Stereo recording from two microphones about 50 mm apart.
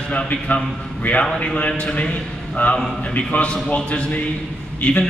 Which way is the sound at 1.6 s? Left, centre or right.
Left.